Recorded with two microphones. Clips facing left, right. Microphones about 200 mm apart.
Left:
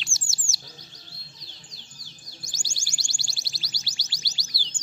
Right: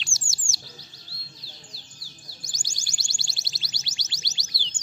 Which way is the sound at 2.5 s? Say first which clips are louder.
Left 1 dB; 15° right (ahead or behind).